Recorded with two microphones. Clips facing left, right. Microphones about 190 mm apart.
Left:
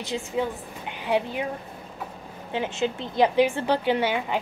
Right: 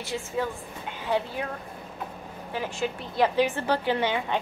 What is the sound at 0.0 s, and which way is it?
A woman's voice, 20° left (ahead or behind).